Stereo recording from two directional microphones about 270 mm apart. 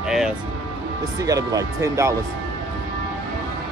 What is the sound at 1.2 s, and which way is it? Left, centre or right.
Speech, centre.